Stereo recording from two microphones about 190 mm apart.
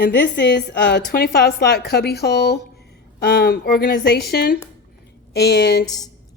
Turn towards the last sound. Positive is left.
turn(degrees=65)  # may be behind; listen again after turning